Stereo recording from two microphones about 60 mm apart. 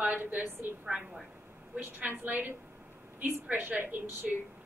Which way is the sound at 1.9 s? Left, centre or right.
Right.